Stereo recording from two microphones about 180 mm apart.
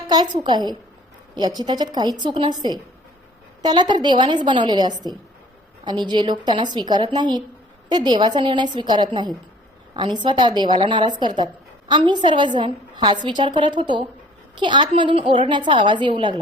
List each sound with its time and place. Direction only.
0.1 s a woman's voice: 20° right (ahead or behind)